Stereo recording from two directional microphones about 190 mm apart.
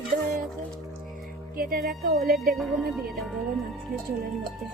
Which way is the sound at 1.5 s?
50° right (ahead or behind).